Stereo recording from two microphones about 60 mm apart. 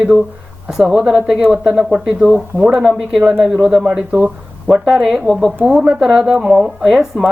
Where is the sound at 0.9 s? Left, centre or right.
Centre.